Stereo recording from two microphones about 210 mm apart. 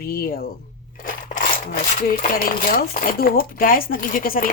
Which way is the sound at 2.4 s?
40° left (ahead or behind).